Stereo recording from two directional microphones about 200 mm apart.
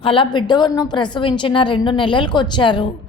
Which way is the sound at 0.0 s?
25° left (ahead or behind).